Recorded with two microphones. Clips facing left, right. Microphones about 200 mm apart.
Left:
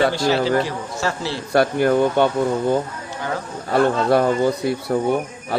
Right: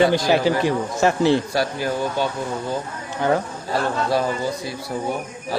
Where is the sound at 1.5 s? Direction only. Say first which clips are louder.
Left 7 dB; 55° left (ahead or behind).